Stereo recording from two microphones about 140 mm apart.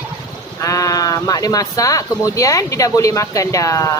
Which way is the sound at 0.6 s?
25° left (ahead or behind).